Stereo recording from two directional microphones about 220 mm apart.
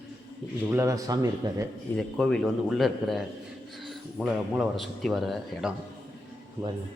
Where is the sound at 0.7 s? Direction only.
15° right (ahead or behind).